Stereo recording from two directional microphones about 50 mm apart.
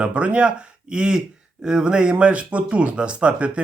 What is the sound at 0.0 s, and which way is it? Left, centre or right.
A man's voice, right.